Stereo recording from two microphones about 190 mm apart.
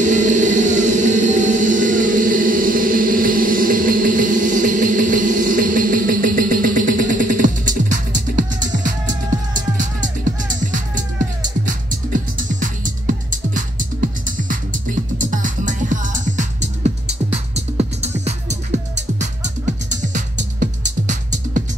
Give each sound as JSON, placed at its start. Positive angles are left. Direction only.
{"t": 0.0, "sound": "music", "side_deg": -40}
{"t": 17.6, "sound": "music", "side_deg": -35}